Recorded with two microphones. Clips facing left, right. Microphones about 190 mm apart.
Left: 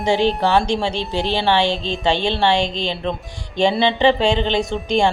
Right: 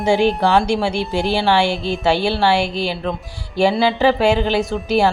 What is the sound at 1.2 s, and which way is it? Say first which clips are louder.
Speech: right 2 dB; 20° left (ahead or behind).